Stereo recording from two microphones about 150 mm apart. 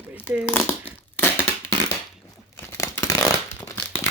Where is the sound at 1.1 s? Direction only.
15° left (ahead or behind).